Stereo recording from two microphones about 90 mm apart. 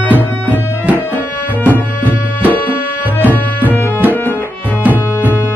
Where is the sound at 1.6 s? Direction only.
20° left (ahead or behind).